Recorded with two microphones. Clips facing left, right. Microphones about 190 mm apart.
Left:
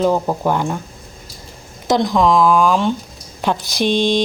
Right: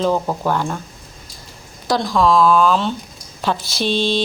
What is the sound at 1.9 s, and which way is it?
A man's voice, 20° left (ahead or behind).